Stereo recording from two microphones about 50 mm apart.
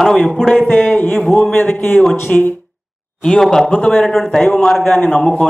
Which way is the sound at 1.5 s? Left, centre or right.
Left.